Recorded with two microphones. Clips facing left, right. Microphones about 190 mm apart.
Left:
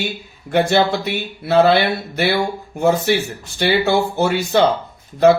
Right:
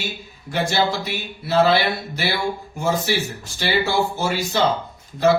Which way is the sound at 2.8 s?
60° left (ahead or behind).